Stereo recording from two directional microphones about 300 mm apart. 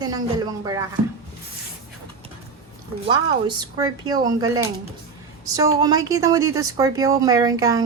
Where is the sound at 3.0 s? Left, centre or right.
Centre.